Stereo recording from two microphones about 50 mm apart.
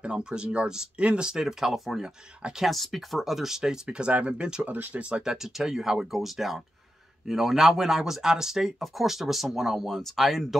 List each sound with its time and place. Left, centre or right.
0.0 s speech: centre
3.8 s speech: right
5.1 s speech: centre